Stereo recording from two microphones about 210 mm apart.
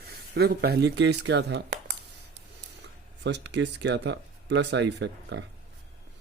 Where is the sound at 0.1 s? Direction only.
50° right (ahead or behind).